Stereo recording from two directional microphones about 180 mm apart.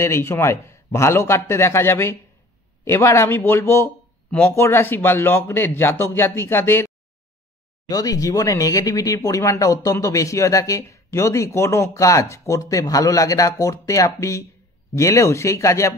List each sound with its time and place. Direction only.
0.0 s speech: 15° left (ahead or behind)
7.9 s speech: 20° left (ahead or behind)